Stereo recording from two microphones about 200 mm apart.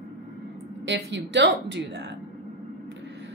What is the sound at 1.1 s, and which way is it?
Speech, 60° right (ahead or behind).